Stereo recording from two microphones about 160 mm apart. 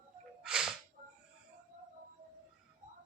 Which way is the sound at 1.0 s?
45° right (ahead or behind).